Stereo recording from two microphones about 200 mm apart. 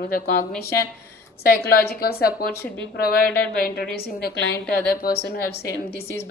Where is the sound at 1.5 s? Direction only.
50° left (ahead or behind).